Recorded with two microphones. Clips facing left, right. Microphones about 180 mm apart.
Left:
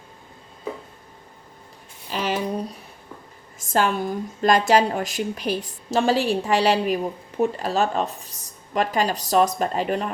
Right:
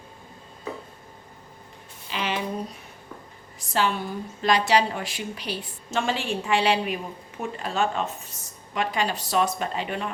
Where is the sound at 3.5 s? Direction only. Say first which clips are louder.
Left 4 dB; 45° left (ahead or behind).